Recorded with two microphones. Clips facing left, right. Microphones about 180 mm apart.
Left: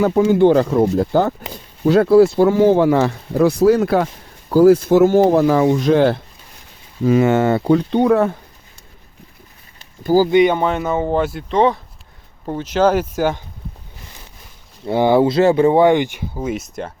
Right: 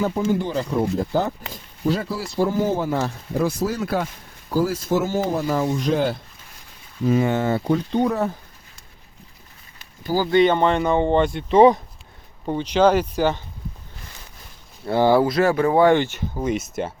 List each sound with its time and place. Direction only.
0.0 s speech: 80° left
1.8 s speech: 65° left (ahead or behind)
10.2 s speech: 15° left (ahead or behind)
11.5 s speech: 10° right (ahead or behind)
12.5 s speech: 5° left (ahead or behind)
14.8 s speech: 15° left (ahead or behind); by 16.9 s 5° right (ahead or behind)